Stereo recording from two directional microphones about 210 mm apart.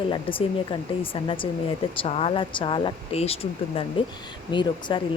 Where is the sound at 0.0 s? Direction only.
25° left (ahead or behind).